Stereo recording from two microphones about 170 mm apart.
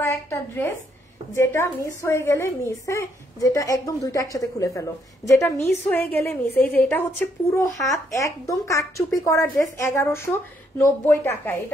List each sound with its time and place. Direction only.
0.0 s a woman's voice: 15° left (ahead or behind)
7.5 s speech: 15° left (ahead or behind)